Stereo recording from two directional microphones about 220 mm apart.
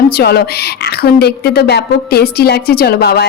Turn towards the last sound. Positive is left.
turn(degrees=45)  # may be behind; listen again after turning